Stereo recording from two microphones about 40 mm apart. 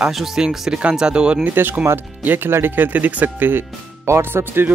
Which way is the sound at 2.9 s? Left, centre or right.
Right.